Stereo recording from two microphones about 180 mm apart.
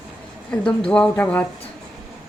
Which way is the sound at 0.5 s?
5° left (ahead or behind).